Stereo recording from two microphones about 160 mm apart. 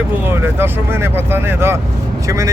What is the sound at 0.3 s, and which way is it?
Speech, 15° right (ahead or behind).